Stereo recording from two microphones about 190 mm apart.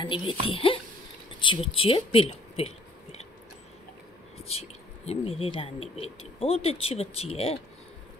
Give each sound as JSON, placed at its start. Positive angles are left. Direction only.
{"t": 0.0, "sound": "speech", "side_deg": 25}
{"t": 4.5, "sound": "speech", "side_deg": 35}